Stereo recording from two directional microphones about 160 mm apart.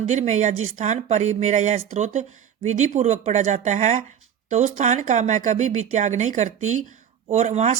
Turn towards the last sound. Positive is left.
turn(degrees=-45)  # may be behind; listen again after turning